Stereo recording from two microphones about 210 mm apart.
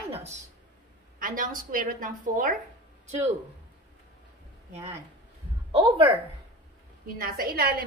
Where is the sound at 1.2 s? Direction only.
40° right (ahead or behind).